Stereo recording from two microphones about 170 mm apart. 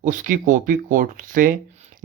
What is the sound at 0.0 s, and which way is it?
Speech, 50° right (ahead or behind).